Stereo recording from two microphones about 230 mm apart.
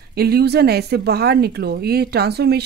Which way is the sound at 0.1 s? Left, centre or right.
Right.